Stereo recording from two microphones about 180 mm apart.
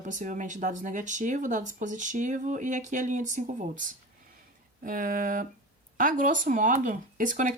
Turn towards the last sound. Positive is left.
turn(degrees=-45)  # may be behind; listen again after turning